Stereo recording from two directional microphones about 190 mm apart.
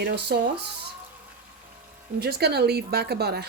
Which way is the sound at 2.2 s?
55° right (ahead or behind).